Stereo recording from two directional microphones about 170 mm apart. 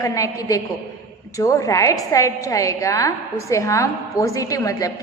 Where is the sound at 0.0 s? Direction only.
20° left (ahead or behind).